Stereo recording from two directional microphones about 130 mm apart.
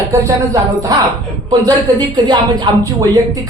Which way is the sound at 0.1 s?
25° right (ahead or behind).